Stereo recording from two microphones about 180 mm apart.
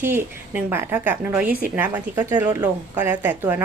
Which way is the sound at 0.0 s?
10° right (ahead or behind).